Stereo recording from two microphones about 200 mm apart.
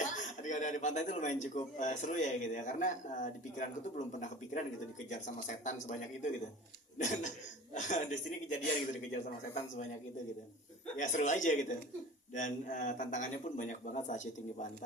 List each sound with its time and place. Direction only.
0.1 s a man's voice: 40° left (ahead or behind)
10.9 s a man's voice: 40° left (ahead or behind)